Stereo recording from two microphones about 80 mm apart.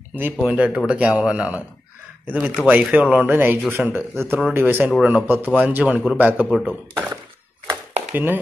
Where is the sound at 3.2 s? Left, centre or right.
Right.